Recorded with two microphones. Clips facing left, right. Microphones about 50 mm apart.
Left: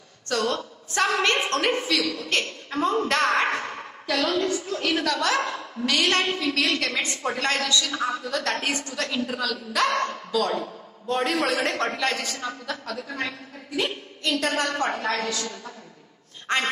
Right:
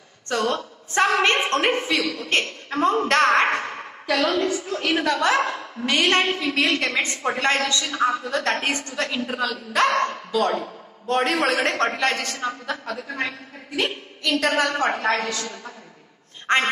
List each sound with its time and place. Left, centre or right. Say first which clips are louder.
0.3 s a woman's voice: right 2 dB; right
2.9 s speech: right 4 dB; right
3.6 s a woman's voice: right 3 dB; right
11.1 s a woman's voice: right 3 dB; right
12.2 s speech: right 3 dB; right
12.4 s a woman's voice: right 4 dB; right
14.5 s a woman's voice: right 4 dB; right
16.4 s speech: right 4 dB; right